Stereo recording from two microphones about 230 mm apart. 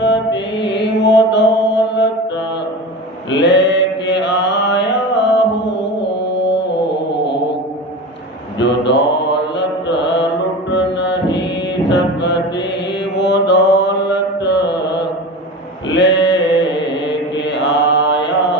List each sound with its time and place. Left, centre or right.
0.0 s mantra: left
3.2 s mantra: left
8.6 s mantra: left
10.7 s music: left
11.9 s mantra: left